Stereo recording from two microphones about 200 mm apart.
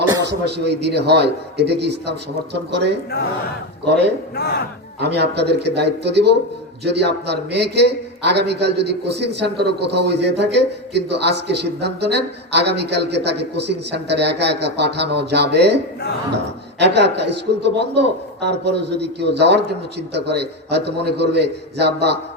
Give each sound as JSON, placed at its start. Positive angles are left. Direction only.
{"t": 0.3, "sound": "a man's voice", "side_deg": -55}
{"t": 4.4, "sound": "speech", "side_deg": 50}
{"t": 4.9, "sound": "a man's voice", "side_deg": -55}